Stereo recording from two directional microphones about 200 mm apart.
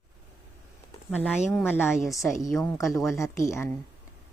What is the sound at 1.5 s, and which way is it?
Speech, centre (ahead or behind).